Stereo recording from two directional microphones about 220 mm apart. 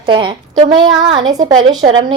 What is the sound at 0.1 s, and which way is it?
A woman's voice, 20° right (ahead or behind).